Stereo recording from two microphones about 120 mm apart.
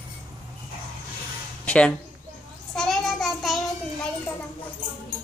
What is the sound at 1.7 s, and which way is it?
Speech, 10° left (ahead or behind).